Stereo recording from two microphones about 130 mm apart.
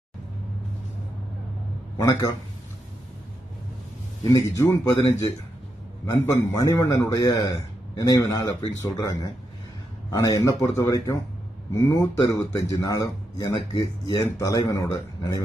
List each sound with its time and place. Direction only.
2.0 s a man's voice: 25° left (ahead or behind)
4.2 s a man's voice: 25° left (ahead or behind)
10.1 s a man's voice: 25° left (ahead or behind)